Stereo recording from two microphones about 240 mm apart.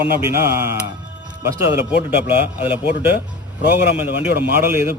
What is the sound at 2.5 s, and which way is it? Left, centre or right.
Speech, centre.